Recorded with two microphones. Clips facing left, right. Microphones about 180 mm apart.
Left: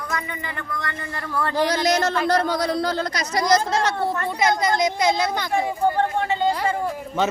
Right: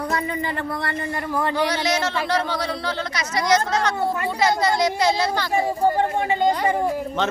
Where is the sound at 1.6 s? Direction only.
40° left (ahead or behind).